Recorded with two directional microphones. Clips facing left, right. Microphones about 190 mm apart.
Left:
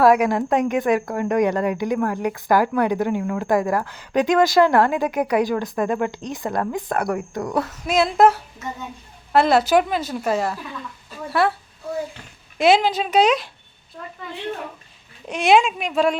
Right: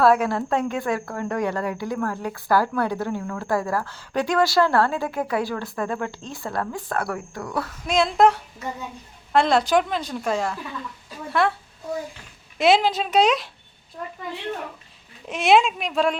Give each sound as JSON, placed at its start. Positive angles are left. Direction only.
{"t": 0.0, "sound": "a woman's voice", "side_deg": 15}
{"t": 7.9, "sound": "a woman's voice", "side_deg": 5}
{"t": 12.5, "sound": "a woman's voice", "side_deg": 0}
{"t": 15.3, "sound": "a woman's voice", "side_deg": 0}